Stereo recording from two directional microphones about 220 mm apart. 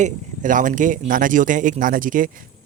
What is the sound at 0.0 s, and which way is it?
Speech, 35° right (ahead or behind).